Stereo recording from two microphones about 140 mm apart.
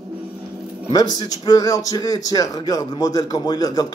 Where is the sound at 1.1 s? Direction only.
30° left (ahead or behind).